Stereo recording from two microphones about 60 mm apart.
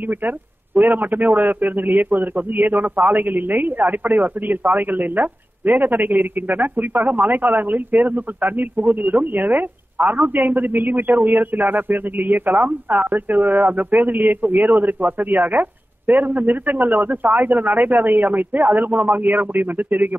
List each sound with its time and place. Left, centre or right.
0.7 s a man's voice: right